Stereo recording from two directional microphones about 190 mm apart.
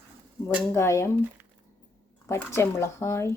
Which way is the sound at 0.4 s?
10° left (ahead or behind).